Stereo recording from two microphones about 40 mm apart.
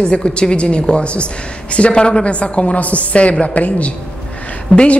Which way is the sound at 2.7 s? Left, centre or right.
Left.